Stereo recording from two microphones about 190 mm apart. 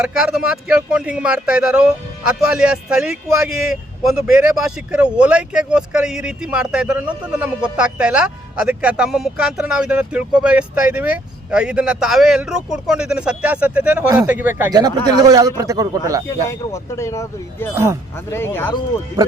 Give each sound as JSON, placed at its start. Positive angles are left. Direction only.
{"t": 0.0, "sound": "speech", "side_deg": -5}
{"t": 14.7, "sound": "speech", "side_deg": -20}
{"t": 16.3, "sound": "speech", "side_deg": 15}